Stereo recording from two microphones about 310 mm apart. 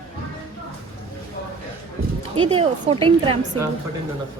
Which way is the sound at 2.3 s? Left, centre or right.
Centre.